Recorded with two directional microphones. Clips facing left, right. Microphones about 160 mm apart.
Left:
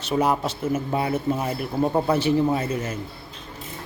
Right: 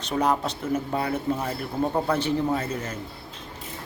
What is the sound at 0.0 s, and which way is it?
Speech, 5° left (ahead or behind).